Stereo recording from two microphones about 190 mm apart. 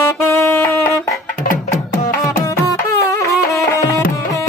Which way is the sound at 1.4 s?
45° left (ahead or behind).